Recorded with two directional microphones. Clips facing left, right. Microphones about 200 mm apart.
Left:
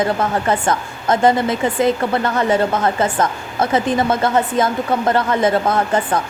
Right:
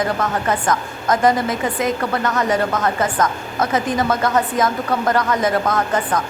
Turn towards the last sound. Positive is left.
turn(degrees=30)  # may be behind; listen again after turning